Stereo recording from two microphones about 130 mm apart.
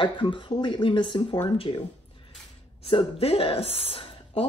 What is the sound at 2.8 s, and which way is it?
A woman's voice, 45° left (ahead or behind).